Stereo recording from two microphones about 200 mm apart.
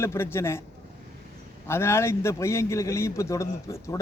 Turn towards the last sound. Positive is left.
turn(degrees=15)  # may be behind; listen again after turning